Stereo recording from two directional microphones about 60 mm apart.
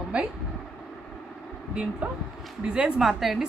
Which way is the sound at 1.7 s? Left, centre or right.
Centre.